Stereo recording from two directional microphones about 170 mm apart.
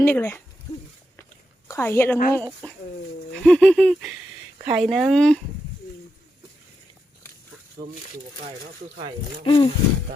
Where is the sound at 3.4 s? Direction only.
5° left (ahead or behind).